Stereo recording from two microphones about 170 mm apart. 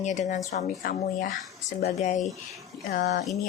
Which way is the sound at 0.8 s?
55° left (ahead or behind).